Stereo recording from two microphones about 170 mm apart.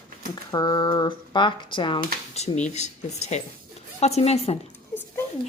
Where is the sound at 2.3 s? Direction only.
40° left (ahead or behind).